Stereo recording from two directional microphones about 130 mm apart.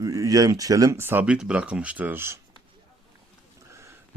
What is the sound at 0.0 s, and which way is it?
Speech, 25° right (ahead or behind).